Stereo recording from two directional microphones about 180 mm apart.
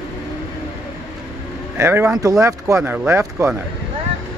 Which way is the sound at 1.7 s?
15° right (ahead or behind).